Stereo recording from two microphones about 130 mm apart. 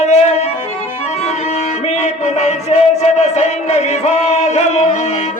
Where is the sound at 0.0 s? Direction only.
55° left (ahead or behind).